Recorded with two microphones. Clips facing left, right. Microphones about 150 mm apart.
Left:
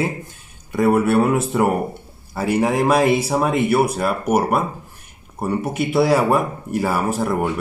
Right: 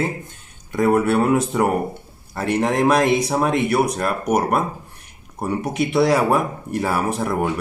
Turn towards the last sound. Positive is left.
turn(degrees=0)  # may be behind; listen again after turning